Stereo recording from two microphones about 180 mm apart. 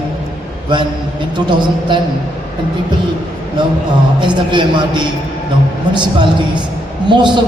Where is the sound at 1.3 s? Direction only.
25° right (ahead or behind).